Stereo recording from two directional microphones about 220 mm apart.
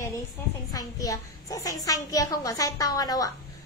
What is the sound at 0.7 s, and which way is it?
A child's voice, 15° left (ahead or behind).